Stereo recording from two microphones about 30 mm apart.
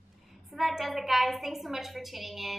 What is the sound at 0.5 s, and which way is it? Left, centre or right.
A woman's voice, centre.